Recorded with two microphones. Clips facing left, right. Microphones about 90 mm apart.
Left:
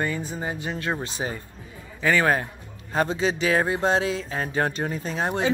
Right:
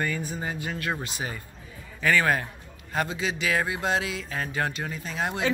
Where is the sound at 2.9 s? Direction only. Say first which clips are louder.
Left 5 dB; 35° left (ahead or behind).